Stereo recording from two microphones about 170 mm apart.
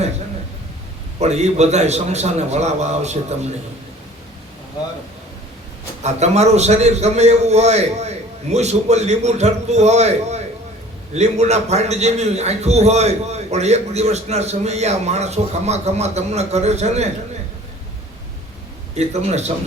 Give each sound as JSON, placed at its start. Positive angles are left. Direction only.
{"t": 1.2, "sound": "a man's voice", "side_deg": -40}
{"t": 6.0, "sound": "a man's voice", "side_deg": -40}
{"t": 18.9, "sound": "a man's voice", "side_deg": -40}